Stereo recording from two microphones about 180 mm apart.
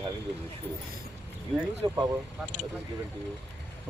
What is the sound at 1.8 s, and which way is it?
Speech, 30° right (ahead or behind).